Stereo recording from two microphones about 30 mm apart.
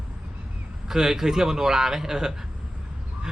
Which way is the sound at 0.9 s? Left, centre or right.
Centre.